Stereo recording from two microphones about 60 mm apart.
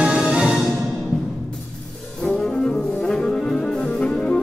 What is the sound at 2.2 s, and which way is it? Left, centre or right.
Brass instrument, centre.